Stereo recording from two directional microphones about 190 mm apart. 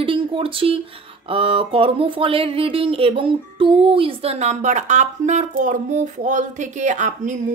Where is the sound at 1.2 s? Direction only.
30° right (ahead or behind).